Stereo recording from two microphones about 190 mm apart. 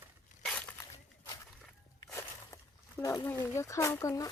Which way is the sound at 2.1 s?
15° left (ahead or behind).